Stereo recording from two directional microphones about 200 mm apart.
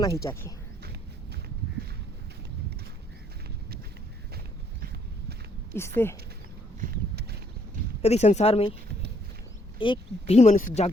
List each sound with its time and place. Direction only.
0.0 s speech: 15° left (ahead or behind)
5.7 s speech: 10° left (ahead or behind)
6.9 s a sound: 55° right (ahead or behind)
8.0 s speech: 35° left (ahead or behind)
9.7 s speech: 25° left (ahead or behind)